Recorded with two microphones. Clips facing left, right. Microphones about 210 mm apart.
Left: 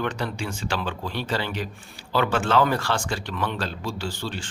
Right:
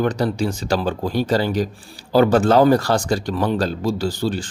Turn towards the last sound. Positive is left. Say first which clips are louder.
# right 9 dB
turn(degrees=-40)  # may be behind; listen again after turning